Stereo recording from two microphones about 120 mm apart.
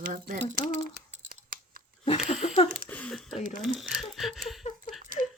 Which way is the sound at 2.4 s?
55° left (ahead or behind).